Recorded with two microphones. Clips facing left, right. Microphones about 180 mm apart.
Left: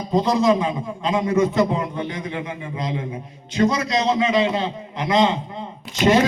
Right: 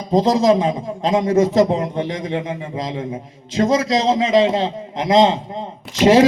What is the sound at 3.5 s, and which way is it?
A man's voice, 90° right.